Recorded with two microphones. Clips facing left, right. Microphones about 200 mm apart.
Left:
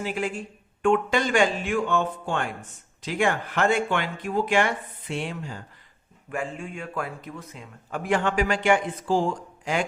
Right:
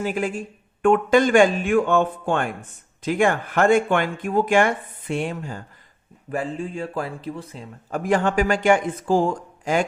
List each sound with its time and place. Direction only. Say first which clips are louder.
0.0 s speech: right 4 dB; 45° right (ahead or behind)
6.3 s a man's voice: right 5 dB; 35° right (ahead or behind)